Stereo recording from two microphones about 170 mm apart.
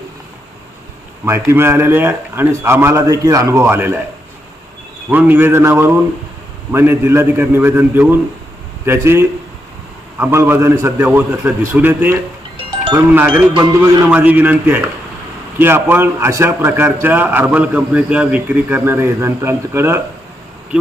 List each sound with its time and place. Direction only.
1.2 s a man's voice: 15° right (ahead or behind)
5.1 s a man's voice: 10° right (ahead or behind)
13.1 s a man's voice: 10° right (ahead or behind)
13.5 s speech: 25° right (ahead or behind)
14.1 s a man's voice: 10° right (ahead or behind)